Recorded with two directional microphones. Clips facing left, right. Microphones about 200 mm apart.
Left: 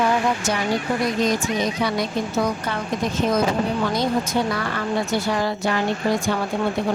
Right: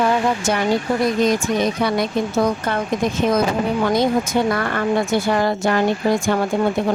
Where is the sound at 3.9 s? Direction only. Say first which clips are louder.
Right 4 dB; 50° right (ahead or behind).